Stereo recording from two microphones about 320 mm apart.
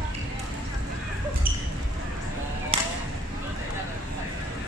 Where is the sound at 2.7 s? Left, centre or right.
Centre.